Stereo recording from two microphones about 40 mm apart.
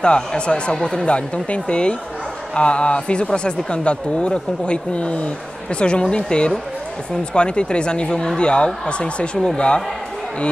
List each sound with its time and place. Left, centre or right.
0.0 s speech: left